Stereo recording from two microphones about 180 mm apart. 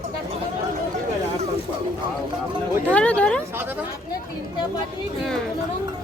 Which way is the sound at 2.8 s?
5° left (ahead or behind).